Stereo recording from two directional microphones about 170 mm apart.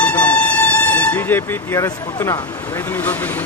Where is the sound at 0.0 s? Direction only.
10° left (ahead or behind).